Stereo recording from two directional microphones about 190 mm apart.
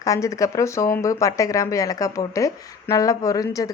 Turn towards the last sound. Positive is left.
turn(degrees=20)  # may be behind; listen again after turning